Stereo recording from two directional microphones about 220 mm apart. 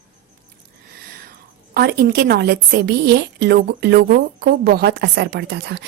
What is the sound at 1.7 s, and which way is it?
A woman's voice, 45° right (ahead or behind).